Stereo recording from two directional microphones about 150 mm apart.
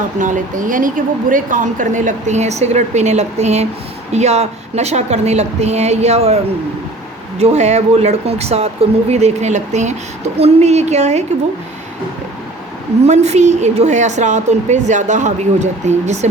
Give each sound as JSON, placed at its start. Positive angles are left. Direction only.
{"t": 0.2, "sound": "a woman's voice", "side_deg": -60}
{"t": 13.1, "sound": "speech", "side_deg": -50}